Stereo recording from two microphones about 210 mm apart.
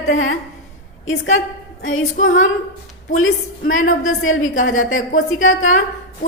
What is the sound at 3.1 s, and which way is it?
A woman's voice, 75° left (ahead or behind).